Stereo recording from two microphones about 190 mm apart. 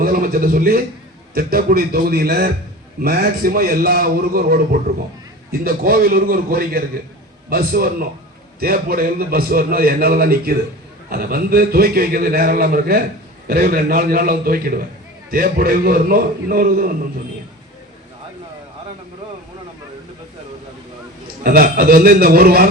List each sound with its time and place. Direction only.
0.0 s a man's voice: 50° right (ahead or behind)
21.4 s a man's voice: 50° right (ahead or behind)